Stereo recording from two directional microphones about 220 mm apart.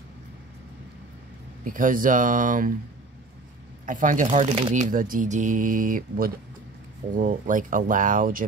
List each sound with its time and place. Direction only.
1.6 s speech: 40° right (ahead or behind)
3.8 s speech: 35° right (ahead or behind)